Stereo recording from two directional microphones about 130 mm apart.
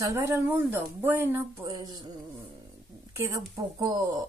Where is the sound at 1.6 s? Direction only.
30° right (ahead or behind).